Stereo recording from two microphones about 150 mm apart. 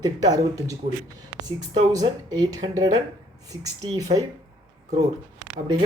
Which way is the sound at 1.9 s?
25° right (ahead or behind).